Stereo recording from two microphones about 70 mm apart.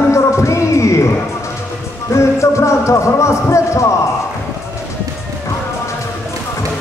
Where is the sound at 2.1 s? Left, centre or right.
Left.